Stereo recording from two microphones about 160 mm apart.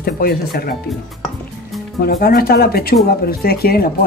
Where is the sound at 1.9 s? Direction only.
75° left (ahead or behind).